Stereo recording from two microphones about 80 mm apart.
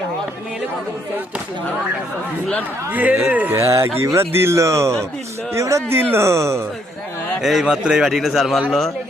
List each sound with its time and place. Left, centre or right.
2.9 s a man's voice: centre
3.5 s speech: right
7.4 s a man's voice: centre